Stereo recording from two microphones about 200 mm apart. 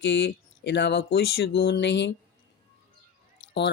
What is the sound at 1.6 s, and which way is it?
Mantra, 55° left (ahead or behind).